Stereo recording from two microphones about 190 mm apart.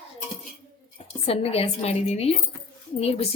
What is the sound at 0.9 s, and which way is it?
A woman's voice, 30° left (ahead or behind).